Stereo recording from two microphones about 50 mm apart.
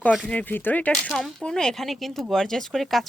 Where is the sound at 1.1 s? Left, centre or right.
Centre.